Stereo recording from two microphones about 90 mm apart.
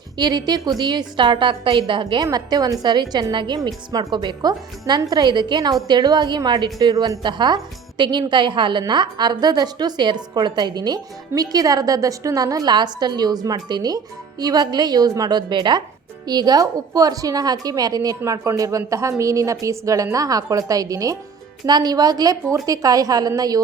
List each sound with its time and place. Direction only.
0.2 s a woman's voice: 50° right (ahead or behind)
2.2 s a woman's voice: 45° right (ahead or behind)
3.6 s a woman's voice: 45° right (ahead or behind)
4.1 s a woman's voice: 60° right (ahead or behind)
7.2 s a woman's voice: 55° right (ahead or behind)